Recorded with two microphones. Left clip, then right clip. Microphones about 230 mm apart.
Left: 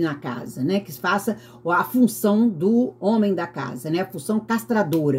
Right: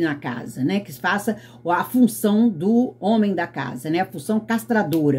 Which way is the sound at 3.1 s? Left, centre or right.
Centre.